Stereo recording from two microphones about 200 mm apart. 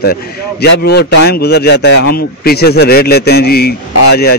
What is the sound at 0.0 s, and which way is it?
A man's voice, 50° left (ahead or behind).